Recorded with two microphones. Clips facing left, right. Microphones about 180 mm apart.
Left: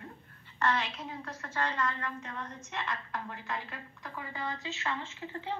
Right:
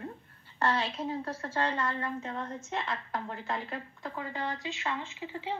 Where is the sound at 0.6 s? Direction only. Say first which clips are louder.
Right 2 dB; 30° right (ahead or behind).